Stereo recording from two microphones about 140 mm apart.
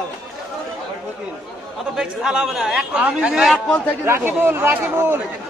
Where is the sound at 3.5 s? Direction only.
10° left (ahead or behind).